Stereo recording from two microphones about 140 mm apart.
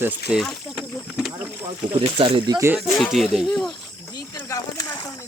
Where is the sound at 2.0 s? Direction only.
40° right (ahead or behind).